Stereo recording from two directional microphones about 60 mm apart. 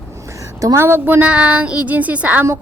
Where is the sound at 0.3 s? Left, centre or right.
Right.